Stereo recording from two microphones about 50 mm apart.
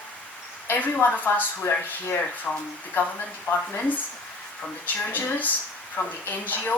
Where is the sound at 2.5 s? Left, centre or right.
Left.